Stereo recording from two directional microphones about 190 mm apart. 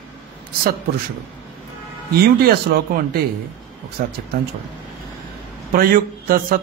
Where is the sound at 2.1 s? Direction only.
55° right (ahead or behind).